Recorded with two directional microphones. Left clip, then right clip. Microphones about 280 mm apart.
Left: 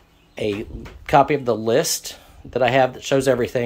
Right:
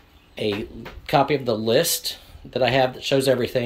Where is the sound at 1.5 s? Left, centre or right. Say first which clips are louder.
Left 1 dB; centre.